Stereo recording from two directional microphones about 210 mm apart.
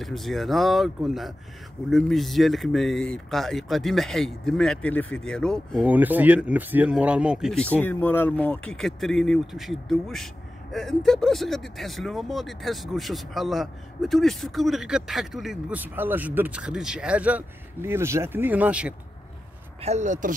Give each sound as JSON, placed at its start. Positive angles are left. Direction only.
{"t": 0.0, "sound": "speech", "side_deg": 0}
{"t": 5.9, "sound": "speech", "side_deg": -10}
{"t": 19.8, "sound": "speech", "side_deg": -35}